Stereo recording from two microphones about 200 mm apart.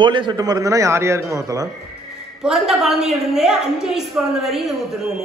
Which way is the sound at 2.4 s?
Centre (ahead or behind).